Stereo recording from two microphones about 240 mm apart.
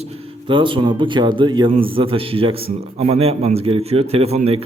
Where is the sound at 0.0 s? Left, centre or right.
Right.